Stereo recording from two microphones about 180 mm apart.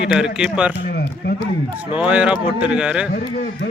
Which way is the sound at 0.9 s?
65° left (ahead or behind).